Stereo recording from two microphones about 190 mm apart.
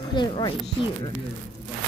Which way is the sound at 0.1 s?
25° left (ahead or behind).